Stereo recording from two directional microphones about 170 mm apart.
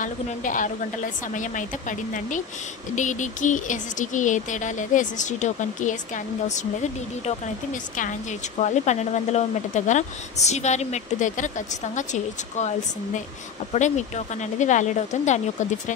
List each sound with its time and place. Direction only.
0.0 s speech: 50° left (ahead or behind)
7.9 s speech: 50° left (ahead or behind)